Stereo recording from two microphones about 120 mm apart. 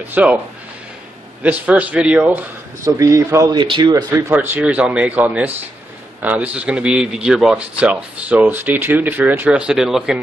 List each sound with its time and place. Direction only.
0.1 s a man's voice: 10° right (ahead or behind)
1.4 s a man's voice: 10° right (ahead or behind)
2.8 s a man's voice: 25° right (ahead or behind)
3.5 s speech: 40° right (ahead or behind)
4.3 s a man's voice: 15° right (ahead or behind)